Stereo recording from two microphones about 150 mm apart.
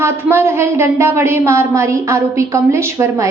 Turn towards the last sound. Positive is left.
turn(degrees=-20)  # may be behind; listen again after turning